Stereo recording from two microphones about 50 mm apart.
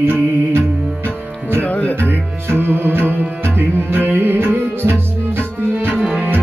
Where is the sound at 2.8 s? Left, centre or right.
Right.